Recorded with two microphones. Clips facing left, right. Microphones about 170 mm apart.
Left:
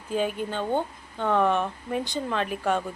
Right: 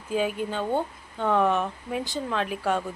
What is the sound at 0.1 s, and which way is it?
Speech, 5° right (ahead or behind).